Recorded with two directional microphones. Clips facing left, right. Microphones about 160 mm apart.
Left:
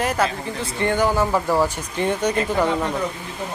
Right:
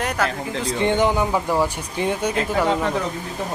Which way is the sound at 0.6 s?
20° right (ahead or behind).